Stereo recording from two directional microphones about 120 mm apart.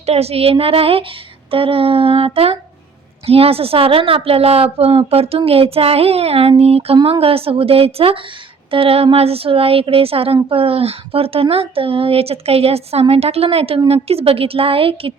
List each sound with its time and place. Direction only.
0.0 s a woman's voice: 60° right (ahead or behind)